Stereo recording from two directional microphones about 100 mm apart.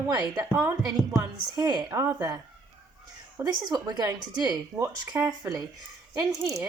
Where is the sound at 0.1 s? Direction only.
45° right (ahead or behind).